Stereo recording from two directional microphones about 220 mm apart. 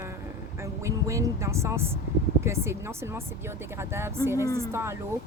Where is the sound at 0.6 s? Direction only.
15° right (ahead or behind).